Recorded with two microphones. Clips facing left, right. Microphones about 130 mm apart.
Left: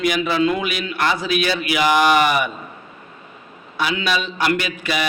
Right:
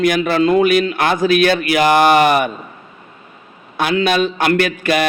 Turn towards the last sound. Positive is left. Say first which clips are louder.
# right 7 dB
turn(degrees=-55)  # may be behind; listen again after turning